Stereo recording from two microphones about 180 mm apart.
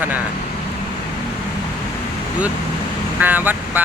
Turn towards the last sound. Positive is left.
turn(degrees=-10)  # may be behind; listen again after turning